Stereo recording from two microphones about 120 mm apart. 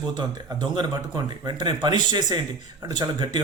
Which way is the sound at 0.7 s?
35° right (ahead or behind).